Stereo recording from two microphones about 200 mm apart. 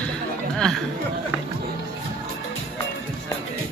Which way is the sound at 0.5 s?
Centre (ahead or behind).